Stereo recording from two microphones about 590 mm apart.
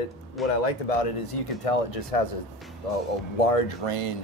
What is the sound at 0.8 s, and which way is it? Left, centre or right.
Speech, left.